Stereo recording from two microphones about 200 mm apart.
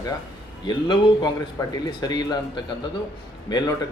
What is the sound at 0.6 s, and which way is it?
A man's voice, 20° left (ahead or behind).